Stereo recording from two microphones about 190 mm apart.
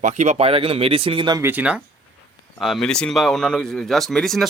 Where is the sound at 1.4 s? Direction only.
10° right (ahead or behind).